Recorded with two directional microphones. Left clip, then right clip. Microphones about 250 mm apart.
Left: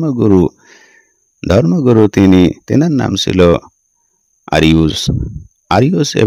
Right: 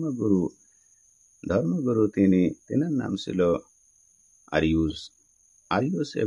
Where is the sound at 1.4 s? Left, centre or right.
Left.